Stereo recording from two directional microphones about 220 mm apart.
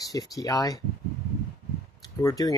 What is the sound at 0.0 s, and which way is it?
Speech, 15° left (ahead or behind).